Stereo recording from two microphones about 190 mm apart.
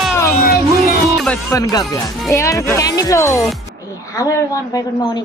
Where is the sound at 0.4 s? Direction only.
50° left (ahead or behind).